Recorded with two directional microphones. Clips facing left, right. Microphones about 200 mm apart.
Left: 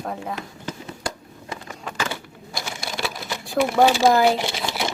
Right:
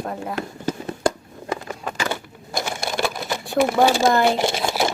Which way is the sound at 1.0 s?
50° right (ahead or behind).